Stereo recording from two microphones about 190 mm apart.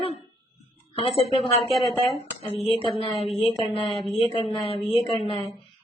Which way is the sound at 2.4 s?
30° left (ahead or behind).